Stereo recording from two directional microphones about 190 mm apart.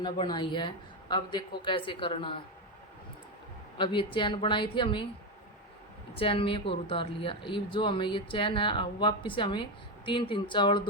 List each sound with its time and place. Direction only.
0.0 s a woman's voice: 25° left (ahead or behind)
3.8 s a woman's voice: 25° left (ahead or behind)
6.1 s a woman's voice: 30° left (ahead or behind)